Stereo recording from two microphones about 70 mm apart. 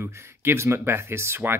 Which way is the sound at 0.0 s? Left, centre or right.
Right.